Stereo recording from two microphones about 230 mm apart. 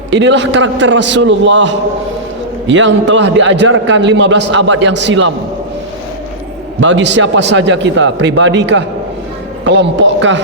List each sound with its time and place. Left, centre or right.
0.1 s a man's voice: right
6.7 s a man's voice: right